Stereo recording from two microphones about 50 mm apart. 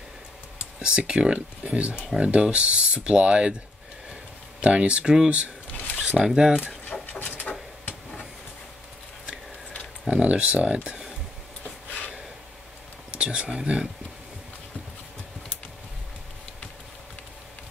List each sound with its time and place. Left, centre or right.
0.7 s speech: centre
4.6 s speech: right
5.7 s a sound: left
6.1 s speech: centre
6.8 s a sound: left
10.0 s speech: right
13.1 s speech: right